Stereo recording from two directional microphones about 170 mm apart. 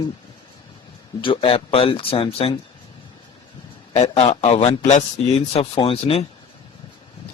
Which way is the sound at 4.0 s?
35° left (ahead or behind).